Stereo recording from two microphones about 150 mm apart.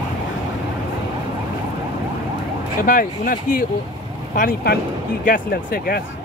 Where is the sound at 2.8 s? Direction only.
65° left (ahead or behind).